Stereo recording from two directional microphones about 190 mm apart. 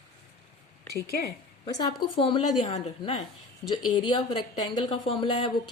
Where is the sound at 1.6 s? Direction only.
20° left (ahead or behind).